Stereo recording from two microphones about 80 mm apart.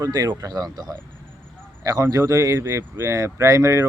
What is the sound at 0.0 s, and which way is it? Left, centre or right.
Speech, right.